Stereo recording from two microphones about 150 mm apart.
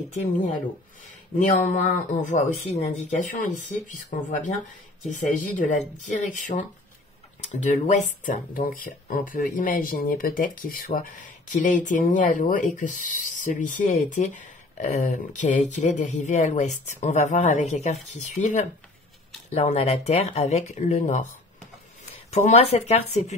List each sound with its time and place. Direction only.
1.4 s speech: 55° left (ahead or behind)
11.5 s speech: 55° left (ahead or behind)
22.3 s speech: 45° left (ahead or behind)